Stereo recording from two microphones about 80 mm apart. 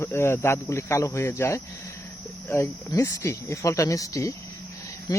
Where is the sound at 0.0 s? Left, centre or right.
Left.